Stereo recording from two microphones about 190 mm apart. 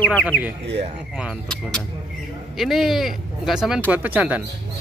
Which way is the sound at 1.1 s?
Centre (ahead or behind).